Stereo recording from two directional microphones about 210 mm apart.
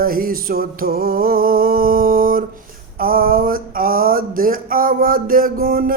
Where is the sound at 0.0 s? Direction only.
45° right (ahead or behind).